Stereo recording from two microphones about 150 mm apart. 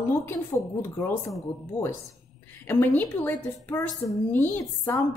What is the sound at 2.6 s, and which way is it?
A woman's voice, 15° left (ahead or behind).